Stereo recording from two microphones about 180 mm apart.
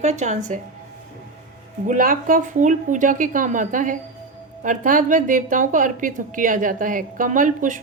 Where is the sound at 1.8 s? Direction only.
50° right (ahead or behind).